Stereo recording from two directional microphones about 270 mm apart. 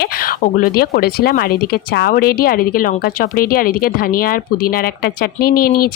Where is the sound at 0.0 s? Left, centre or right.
Left.